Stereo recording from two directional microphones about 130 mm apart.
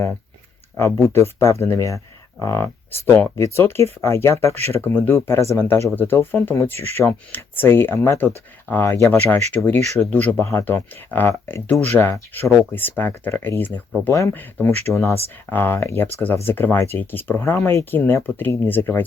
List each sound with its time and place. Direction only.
1.4 s speech: 20° left (ahead or behind)